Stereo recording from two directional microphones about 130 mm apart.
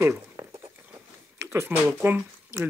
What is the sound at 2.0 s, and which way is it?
Speech, 20° right (ahead or behind).